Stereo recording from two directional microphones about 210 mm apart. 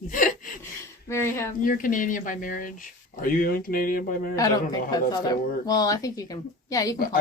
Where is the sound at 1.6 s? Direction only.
40° left (ahead or behind).